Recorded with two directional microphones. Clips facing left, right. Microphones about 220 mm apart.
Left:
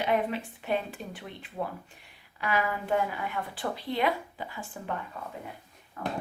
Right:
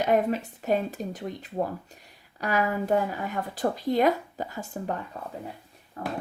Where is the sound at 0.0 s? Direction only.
40° right (ahead or behind).